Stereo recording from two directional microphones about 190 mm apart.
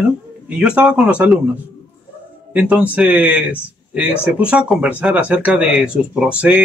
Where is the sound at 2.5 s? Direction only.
5° right (ahead or behind).